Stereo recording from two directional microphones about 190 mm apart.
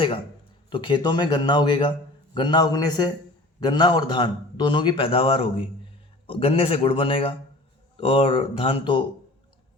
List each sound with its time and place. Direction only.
0.7 s a man's voice: 25° left (ahead or behind)